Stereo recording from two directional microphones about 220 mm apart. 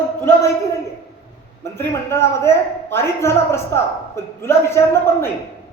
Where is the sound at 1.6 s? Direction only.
10° left (ahead or behind).